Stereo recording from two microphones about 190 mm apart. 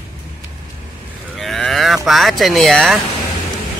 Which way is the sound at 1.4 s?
Centre (ahead or behind).